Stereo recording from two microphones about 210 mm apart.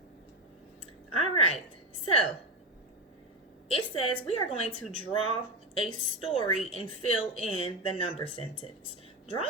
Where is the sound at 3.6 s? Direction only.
25° left (ahead or behind).